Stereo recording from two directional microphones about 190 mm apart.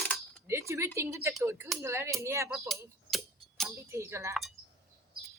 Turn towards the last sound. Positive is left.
turn(degrees=-15)  # may be behind; listen again after turning